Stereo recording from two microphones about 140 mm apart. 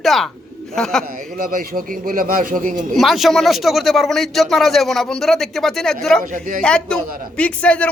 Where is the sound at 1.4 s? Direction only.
85° right.